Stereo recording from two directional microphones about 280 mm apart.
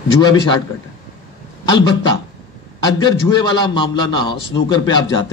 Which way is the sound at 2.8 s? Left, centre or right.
Centre.